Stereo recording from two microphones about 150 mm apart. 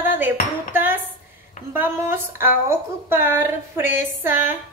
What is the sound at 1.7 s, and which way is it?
A woman's voice, 15° right (ahead or behind).